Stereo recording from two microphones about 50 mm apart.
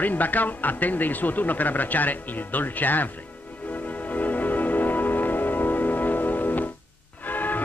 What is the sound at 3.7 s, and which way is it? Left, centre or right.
Music, left.